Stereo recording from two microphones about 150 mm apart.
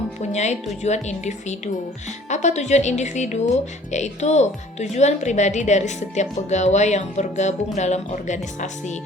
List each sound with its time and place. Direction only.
0.2 s speech: 50° left (ahead or behind)